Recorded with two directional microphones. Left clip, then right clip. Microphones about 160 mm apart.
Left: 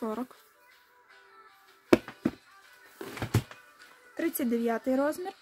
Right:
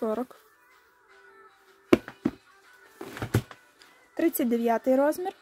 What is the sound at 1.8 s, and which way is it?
Chop, 10° right (ahead or behind).